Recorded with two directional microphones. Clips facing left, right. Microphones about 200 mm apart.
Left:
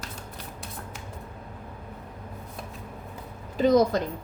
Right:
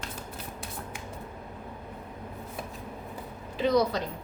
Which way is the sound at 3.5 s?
45° left (ahead or behind).